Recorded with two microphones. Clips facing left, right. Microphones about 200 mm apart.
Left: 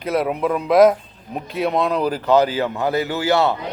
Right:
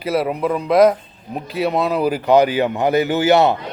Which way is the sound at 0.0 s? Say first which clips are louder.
Right 1 dB; 5° right (ahead or behind).